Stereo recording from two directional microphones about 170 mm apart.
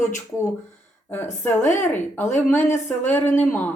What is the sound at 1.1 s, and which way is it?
Speech, 10° left (ahead or behind).